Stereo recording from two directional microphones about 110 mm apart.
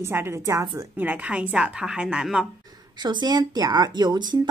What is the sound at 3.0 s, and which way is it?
A woman's voice, 40° right (ahead or behind).